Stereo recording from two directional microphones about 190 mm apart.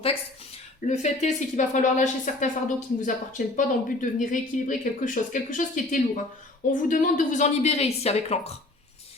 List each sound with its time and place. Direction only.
0.9 s speech: 40° left (ahead or behind)